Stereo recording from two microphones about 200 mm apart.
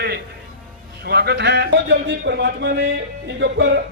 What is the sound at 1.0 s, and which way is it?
A man's voice, 55° right (ahead or behind).